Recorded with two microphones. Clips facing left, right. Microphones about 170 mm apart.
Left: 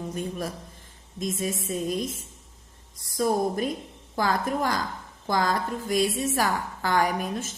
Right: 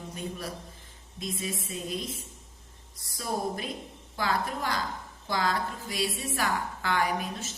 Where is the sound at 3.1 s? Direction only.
45° left (ahead or behind).